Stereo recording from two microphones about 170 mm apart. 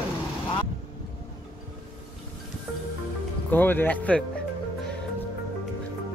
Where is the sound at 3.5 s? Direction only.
10° left (ahead or behind).